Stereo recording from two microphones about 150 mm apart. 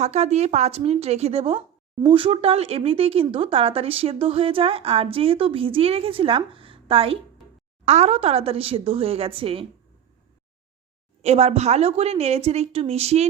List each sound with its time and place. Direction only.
0.0 s a woman's voice: 45° right (ahead or behind)
11.2 s a woman's voice: 45° right (ahead or behind)